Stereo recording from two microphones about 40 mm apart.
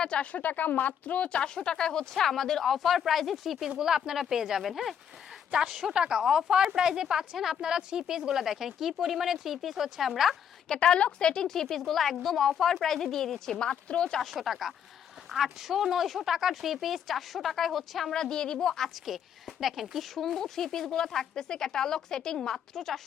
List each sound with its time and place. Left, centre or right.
0.2 s speech: left; by 4.9 s centre
5.9 s speech: right
6.2 s speech: centre
10.7 s a woman's voice: left
11.4 s speech: centre
13.6 s a woman's voice: left
14.2 s speech: centre
18.1 s speech: centre
19.0 s speech: centre